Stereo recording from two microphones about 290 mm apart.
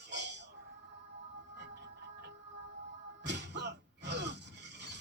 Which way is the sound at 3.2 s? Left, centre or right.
Right.